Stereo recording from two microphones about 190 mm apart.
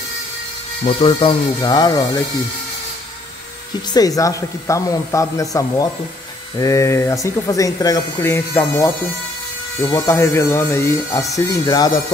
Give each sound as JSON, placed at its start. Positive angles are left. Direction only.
{"t": 0.8, "sound": "speech", "side_deg": 30}
{"t": 3.9, "sound": "speech", "side_deg": 20}